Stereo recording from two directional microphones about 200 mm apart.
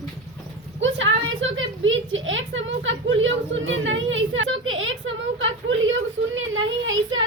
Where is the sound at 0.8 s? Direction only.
70° right (ahead or behind).